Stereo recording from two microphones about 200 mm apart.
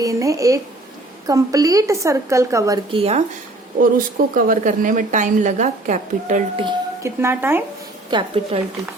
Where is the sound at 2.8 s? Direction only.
30° right (ahead or behind).